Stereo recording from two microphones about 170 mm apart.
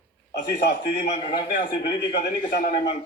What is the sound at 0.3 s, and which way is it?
Speech, 90° left.